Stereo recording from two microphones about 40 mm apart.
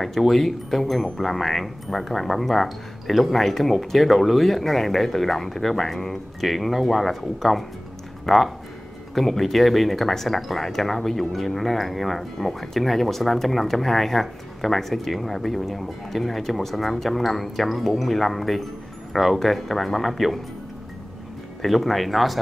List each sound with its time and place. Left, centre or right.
0.3 s speech: centre
21.5 s speech: centre